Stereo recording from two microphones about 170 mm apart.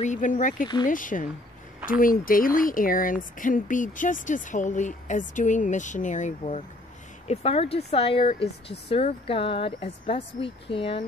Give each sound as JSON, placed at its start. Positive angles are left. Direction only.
{"t": 0.0, "sound": "speech", "side_deg": 50}